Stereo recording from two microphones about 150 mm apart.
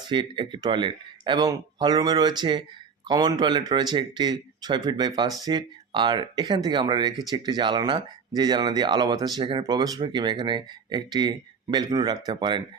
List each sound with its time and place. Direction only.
0.1 s speech: 30° right (ahead or behind)